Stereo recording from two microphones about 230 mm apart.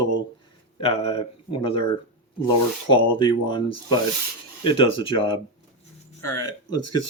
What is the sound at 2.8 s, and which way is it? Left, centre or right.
Speech, left.